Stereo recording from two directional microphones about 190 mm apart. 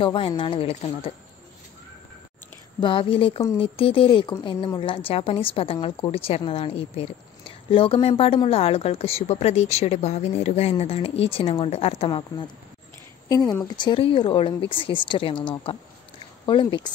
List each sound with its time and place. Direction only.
0.0 s speech: 25° left (ahead or behind)
2.8 s a woman's voice: 25° left (ahead or behind)